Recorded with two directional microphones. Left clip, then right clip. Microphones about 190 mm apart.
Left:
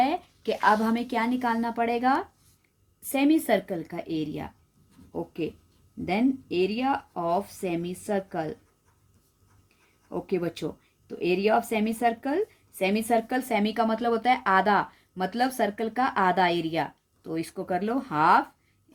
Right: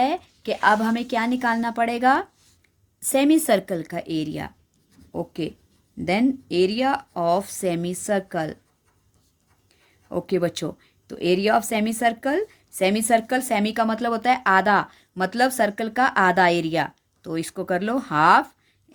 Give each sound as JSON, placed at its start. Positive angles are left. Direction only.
{"t": 0.0, "sound": "a woman's voice", "side_deg": -35}
{"t": 10.1, "sound": "a woman's voice", "side_deg": -50}